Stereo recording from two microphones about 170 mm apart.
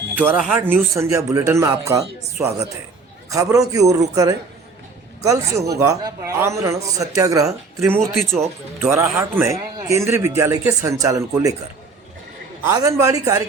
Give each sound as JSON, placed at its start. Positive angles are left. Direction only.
{"t": 0.2, "sound": "a man's voice", "side_deg": -10}
{"t": 12.6, "sound": "a man's voice", "side_deg": -20}